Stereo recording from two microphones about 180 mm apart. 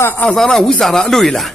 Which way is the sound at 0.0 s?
10° left (ahead or behind).